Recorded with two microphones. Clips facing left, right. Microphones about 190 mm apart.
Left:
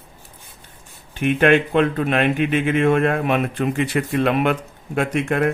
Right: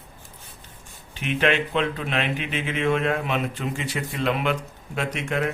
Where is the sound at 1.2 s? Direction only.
50° left (ahead or behind).